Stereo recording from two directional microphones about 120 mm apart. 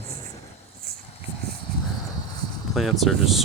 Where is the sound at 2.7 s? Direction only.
Centre (ahead or behind).